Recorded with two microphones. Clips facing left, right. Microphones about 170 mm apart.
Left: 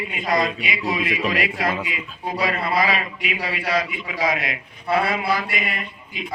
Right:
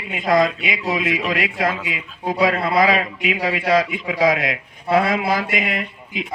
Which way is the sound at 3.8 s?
90° right.